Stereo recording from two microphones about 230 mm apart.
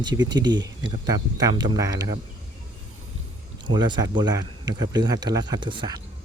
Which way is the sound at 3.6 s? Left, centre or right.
Centre.